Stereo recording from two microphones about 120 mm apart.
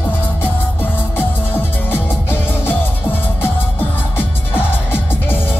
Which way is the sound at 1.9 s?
20° left (ahead or behind).